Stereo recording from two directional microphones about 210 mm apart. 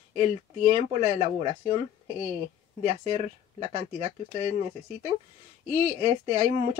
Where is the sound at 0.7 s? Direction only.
25° right (ahead or behind).